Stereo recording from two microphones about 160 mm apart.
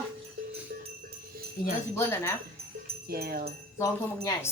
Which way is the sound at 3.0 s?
70° right (ahead or behind).